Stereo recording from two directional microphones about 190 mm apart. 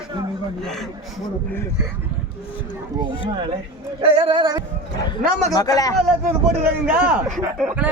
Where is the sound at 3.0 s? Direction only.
25° right (ahead or behind).